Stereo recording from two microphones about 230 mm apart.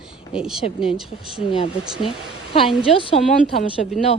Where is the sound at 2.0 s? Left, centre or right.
Left.